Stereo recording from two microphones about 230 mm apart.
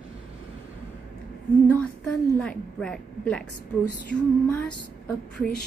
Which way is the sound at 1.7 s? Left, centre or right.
Centre.